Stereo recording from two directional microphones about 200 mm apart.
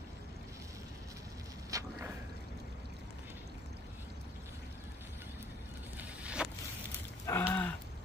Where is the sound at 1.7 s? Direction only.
15° right (ahead or behind).